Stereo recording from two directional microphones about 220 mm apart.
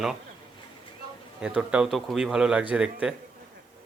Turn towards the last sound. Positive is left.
turn(degrees=-5)  # may be behind; listen again after turning